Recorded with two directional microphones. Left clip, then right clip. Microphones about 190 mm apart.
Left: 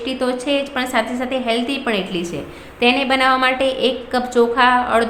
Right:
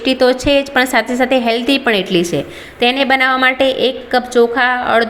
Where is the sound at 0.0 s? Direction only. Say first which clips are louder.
Right 9 dB; 30° right (ahead or behind).